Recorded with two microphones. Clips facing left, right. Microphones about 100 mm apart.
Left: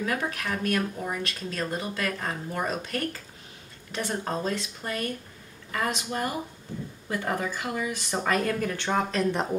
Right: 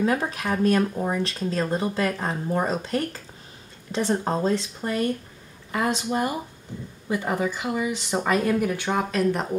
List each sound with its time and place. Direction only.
0.0 s speech: 25° right (ahead or behind); by 9.5 s 5° right (ahead or behind)